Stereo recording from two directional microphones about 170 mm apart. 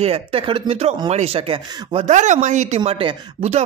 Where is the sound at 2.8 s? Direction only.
30° right (ahead or behind).